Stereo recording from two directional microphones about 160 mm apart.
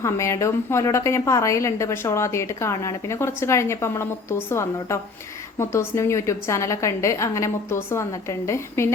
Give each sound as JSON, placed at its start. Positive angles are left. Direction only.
{"t": 0.0, "sound": "a woman's voice", "side_deg": 20}